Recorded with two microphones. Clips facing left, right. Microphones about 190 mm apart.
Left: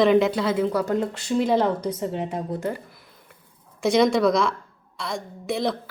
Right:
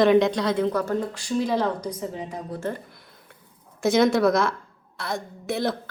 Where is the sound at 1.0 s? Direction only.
25° left (ahead or behind).